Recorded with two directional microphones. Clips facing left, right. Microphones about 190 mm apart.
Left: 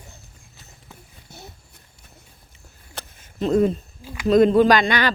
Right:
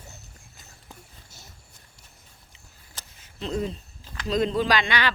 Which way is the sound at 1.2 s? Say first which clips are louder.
Left 10 dB; 60° left (ahead or behind).